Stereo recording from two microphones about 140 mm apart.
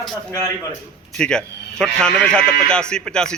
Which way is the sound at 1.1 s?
5° left (ahead or behind).